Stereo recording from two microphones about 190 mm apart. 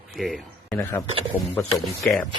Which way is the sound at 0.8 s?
15° left (ahead or behind).